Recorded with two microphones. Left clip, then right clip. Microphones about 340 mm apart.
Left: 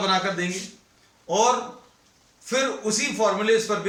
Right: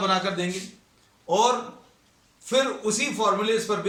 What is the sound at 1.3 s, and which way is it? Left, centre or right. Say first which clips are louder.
Speech: left 1 dB; centre.